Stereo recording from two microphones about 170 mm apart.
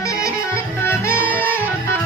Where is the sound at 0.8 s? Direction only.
15° left (ahead or behind).